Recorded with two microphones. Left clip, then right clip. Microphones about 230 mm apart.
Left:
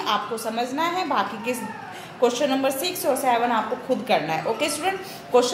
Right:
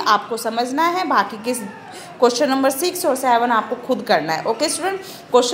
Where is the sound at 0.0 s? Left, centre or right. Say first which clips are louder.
Right 7 dB; right.